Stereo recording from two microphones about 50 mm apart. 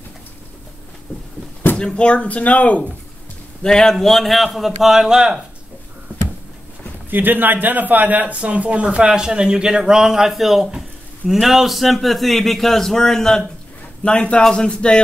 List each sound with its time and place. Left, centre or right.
1.8 s speech: centre
3.6 s a man's voice: centre
7.1 s a man's voice: right; by 13.4 s centre
14.0 s speech: left